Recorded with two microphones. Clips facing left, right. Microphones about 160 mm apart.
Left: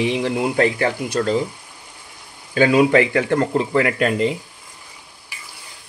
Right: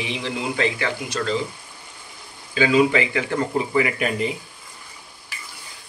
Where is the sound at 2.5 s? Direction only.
55° left (ahead or behind).